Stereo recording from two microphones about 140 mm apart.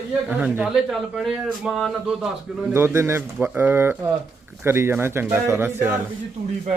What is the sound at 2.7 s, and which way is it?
A man's voice, 15° right (ahead or behind).